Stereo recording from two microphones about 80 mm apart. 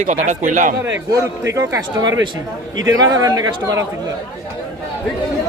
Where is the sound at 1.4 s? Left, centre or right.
Right.